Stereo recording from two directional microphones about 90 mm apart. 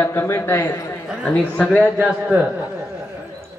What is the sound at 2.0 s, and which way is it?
Speech, 15° right (ahead or behind).